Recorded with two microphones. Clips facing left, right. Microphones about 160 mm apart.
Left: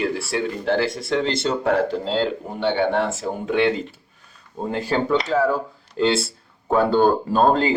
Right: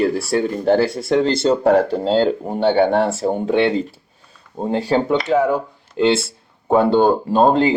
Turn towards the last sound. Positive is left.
turn(degrees=-20)  # may be behind; listen again after turning